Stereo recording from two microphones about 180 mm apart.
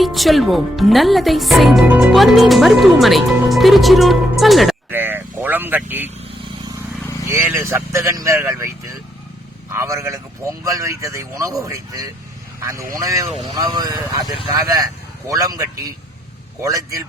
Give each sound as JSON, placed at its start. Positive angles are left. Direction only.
{"t": 0.0, "sound": "speech", "side_deg": 0}
{"t": 4.9, "sound": "vehicle", "side_deg": -10}
{"t": 7.3, "sound": "a man's voice", "side_deg": -15}
{"t": 9.7, "sound": "a man's voice", "side_deg": -15}